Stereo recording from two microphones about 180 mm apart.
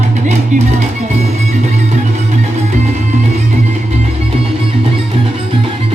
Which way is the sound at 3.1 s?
40° right (ahead or behind).